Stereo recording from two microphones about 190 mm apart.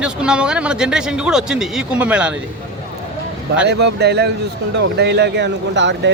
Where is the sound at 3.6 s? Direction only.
60° right (ahead or behind).